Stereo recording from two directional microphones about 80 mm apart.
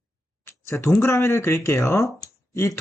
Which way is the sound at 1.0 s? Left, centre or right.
Left.